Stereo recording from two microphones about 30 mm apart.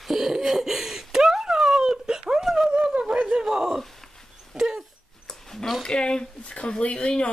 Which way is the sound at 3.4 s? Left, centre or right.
Centre.